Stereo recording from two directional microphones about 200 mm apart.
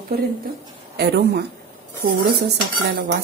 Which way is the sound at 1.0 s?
55° right (ahead or behind).